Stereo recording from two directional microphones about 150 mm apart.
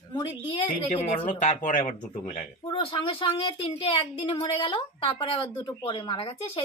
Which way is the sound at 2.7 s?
35° left (ahead or behind).